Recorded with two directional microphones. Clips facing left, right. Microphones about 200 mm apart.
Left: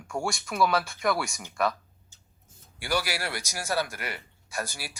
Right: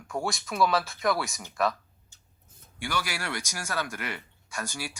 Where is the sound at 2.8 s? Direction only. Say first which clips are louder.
Left 3 dB; 40° left (ahead or behind).